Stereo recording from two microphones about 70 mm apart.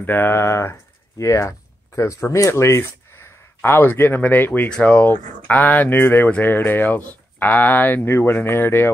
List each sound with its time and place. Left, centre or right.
0.0 s speech: left
4.6 s speech: centre; by 8.9 s left